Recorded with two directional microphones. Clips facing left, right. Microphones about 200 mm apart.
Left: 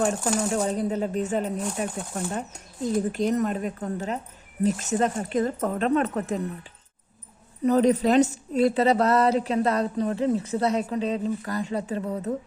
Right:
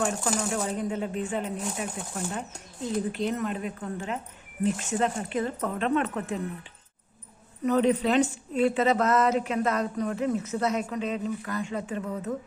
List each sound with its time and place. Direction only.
0.5 s a woman's voice: 35° left (ahead or behind)
7.6 s a woman's voice: 35° left (ahead or behind)